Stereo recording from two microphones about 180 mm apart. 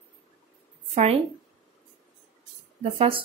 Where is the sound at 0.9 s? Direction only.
35° right (ahead or behind).